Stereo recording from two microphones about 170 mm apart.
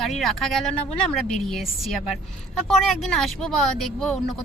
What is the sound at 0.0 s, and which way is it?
Speech, centre (ahead or behind).